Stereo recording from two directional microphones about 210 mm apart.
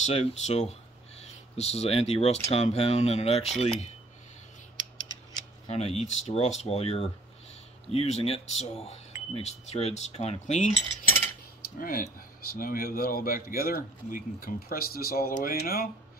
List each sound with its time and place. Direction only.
0.0 s speech: 30° left (ahead or behind)
5.7 s speech: 30° left (ahead or behind)
11.8 s a man's voice: 40° left (ahead or behind)